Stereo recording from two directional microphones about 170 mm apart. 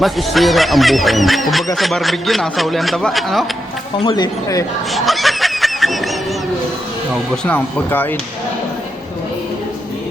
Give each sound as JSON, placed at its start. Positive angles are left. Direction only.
{"t": 0.0, "sound": "a man's voice", "side_deg": 0}
{"t": 4.0, "sound": "speech", "side_deg": 25}
{"t": 4.9, "sound": "snicker", "side_deg": 0}
{"t": 7.4, "sound": "speech", "side_deg": 10}